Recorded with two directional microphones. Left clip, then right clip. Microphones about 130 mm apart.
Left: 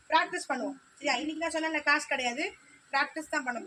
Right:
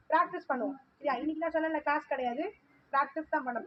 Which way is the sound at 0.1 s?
65° left (ahead or behind).